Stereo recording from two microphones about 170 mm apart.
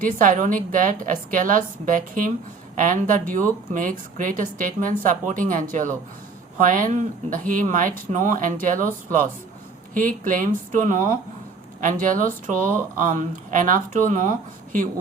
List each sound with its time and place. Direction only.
0.0 s speech: 50° right (ahead or behind)
9.9 s speech: 50° right (ahead or behind)